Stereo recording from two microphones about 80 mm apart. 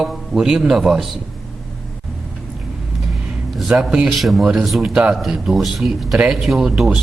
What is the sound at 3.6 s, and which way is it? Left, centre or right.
Speech, centre.